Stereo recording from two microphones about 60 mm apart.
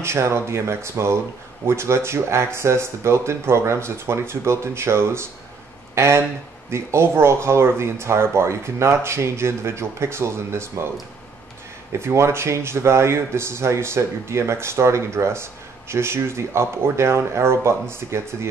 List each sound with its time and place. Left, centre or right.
0.0 s speech: right
11.9 s speech: right